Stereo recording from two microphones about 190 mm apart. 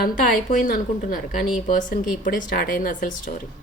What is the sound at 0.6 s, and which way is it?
Speech, 45° left (ahead or behind).